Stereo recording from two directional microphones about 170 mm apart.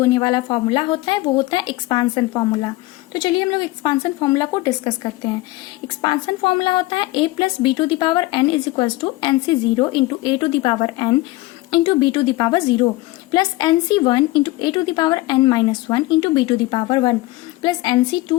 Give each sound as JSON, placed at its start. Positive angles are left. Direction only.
{"t": 0.0, "sound": "a woman's voice", "side_deg": 20}
{"t": 0.5, "sound": "a woman's voice", "side_deg": 30}